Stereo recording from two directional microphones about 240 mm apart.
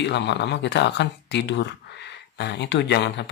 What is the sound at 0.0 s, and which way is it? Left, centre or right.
Speech, left.